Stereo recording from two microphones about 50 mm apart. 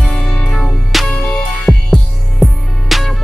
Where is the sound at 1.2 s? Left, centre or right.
Centre.